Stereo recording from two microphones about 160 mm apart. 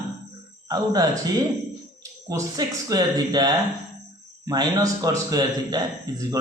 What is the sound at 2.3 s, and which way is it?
A man's voice, 25° right (ahead or behind).